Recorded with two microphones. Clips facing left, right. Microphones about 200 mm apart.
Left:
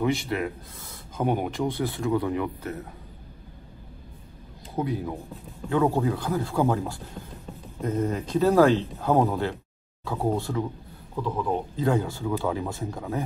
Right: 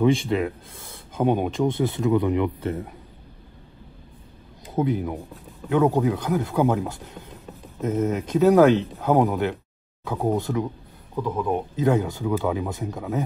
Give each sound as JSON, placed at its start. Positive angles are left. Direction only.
{"t": 0.1, "sound": "speech", "side_deg": -25}
{"t": 4.7, "sound": "speech", "side_deg": -20}
{"t": 7.8, "sound": "speech", "side_deg": -20}